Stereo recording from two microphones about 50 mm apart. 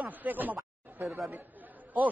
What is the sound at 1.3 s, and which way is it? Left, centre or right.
Chatter, right.